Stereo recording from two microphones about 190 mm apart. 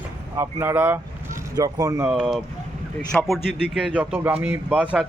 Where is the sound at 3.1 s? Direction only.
Centre (ahead or behind).